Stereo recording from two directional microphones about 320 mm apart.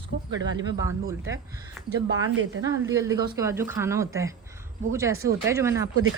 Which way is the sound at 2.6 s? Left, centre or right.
Centre.